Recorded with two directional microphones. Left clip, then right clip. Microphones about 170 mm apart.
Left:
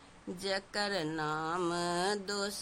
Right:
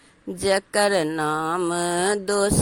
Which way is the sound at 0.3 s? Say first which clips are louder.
Right 15 dB; 40° right (ahead or behind).